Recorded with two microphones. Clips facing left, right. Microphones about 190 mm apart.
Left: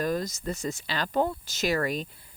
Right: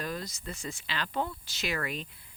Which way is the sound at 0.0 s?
45° left (ahead or behind).